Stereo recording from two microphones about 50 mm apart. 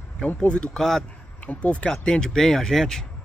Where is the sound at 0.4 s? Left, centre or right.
Centre.